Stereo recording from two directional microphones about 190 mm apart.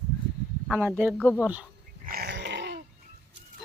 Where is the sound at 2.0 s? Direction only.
55° right (ahead or behind).